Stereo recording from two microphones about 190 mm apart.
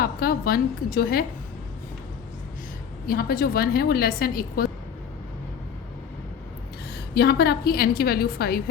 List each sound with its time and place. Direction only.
0.0 s a woman's voice: 50° left (ahead or behind)
3.1 s a woman's voice: 50° left (ahead or behind)
6.9 s a woman's voice: 55° left (ahead or behind)